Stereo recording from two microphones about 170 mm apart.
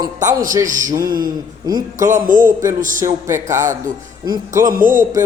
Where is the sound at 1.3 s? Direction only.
20° right (ahead or behind).